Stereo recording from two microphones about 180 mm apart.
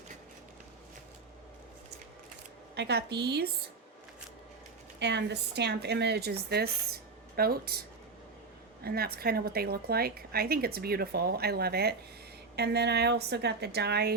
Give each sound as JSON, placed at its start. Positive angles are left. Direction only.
{"t": 2.7, "sound": "speech", "side_deg": -70}
{"t": 4.9, "sound": "a woman's voice", "side_deg": -70}